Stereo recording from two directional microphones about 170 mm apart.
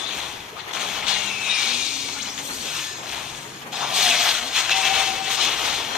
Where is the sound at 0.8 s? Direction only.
5° right (ahead or behind).